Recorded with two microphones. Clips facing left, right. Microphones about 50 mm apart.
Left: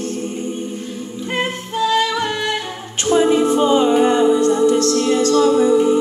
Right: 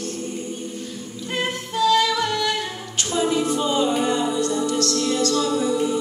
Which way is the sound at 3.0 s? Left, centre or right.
Left.